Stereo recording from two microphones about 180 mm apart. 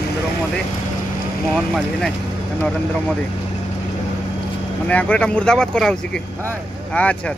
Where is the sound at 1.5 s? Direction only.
Centre (ahead or behind).